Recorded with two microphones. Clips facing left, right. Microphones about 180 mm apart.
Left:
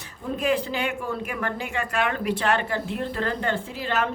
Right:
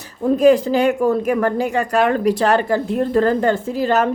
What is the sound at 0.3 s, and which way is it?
Speech, 40° right (ahead or behind).